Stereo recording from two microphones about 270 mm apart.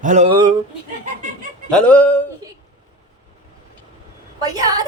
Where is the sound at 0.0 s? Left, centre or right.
Right.